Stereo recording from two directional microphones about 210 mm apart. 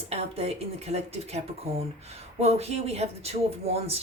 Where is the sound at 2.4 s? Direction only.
30° right (ahead or behind).